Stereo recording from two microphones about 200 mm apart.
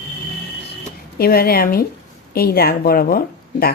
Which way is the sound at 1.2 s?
50° left (ahead or behind).